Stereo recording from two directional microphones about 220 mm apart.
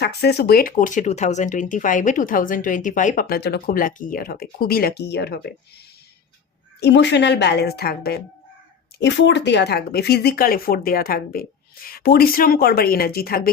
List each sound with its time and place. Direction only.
0.0 s speech: 50° left (ahead or behind)
6.7 s speech: 50° left (ahead or behind)